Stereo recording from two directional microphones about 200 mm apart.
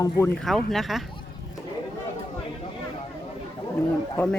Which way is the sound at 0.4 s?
Centre (ahead or behind).